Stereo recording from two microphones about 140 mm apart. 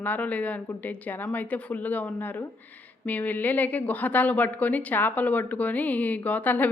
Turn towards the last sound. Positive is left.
turn(degrees=10)  # may be behind; listen again after turning